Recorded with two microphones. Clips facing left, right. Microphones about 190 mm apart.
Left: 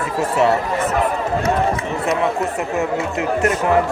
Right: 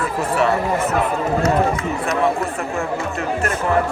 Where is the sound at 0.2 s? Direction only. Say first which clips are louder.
Left 3 dB; 25° left (ahead or behind).